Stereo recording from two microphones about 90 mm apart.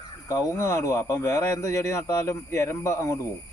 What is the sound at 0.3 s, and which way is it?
Speech, 30° left (ahead or behind).